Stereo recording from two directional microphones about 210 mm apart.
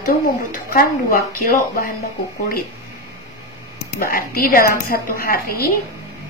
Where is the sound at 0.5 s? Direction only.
40° left (ahead or behind).